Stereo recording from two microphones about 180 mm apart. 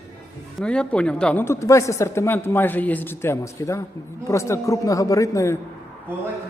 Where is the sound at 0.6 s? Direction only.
5° left (ahead or behind).